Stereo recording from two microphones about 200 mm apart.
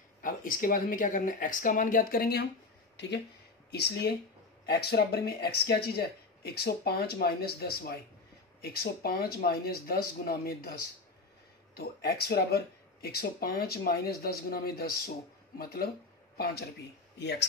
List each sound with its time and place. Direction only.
0.2 s speech: 45° left (ahead or behind)
3.7 s speech: 55° left (ahead or behind)